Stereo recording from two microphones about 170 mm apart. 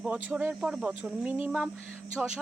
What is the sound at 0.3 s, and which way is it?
Speech, 10° right (ahead or behind).